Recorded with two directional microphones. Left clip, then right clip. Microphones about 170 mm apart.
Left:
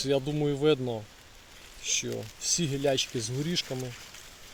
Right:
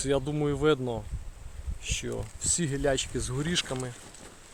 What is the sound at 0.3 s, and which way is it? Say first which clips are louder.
Speech: even; 10° left (ahead or behind).